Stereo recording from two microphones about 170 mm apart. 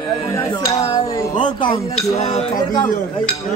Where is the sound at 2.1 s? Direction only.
40° left (ahead or behind).